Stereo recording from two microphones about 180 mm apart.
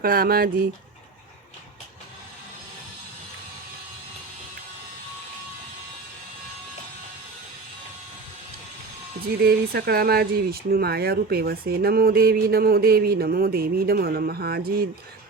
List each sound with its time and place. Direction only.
0.0 s speech: 55° right (ahead or behind)
9.2 s speech: 60° right (ahead or behind)